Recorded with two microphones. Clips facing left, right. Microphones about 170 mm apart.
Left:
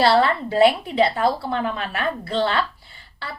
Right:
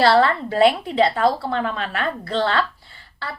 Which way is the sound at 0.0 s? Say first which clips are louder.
Right 1 dB; 15° left (ahead or behind).